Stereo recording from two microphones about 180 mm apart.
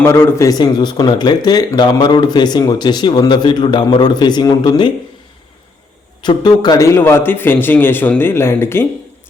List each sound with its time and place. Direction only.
0.0 s speech: 15° left (ahead or behind)
6.2 s a man's voice: 25° left (ahead or behind)